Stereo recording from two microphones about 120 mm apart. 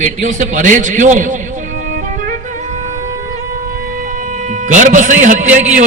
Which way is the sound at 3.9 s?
90° right.